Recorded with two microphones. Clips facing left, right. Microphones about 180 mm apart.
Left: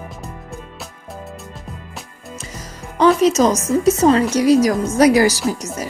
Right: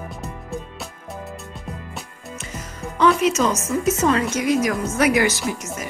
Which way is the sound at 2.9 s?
35° left (ahead or behind).